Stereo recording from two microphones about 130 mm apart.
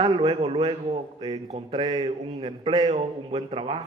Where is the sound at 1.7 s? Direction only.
35° right (ahead or behind).